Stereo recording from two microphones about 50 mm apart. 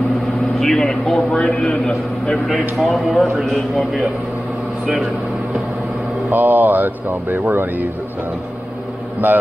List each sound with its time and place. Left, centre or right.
0.6 s a man's voice: centre
2.2 s a man's voice: centre
6.3 s a man's voice: right
9.2 s a man's voice: right